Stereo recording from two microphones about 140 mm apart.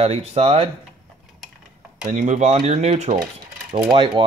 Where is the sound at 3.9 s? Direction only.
35° right (ahead or behind).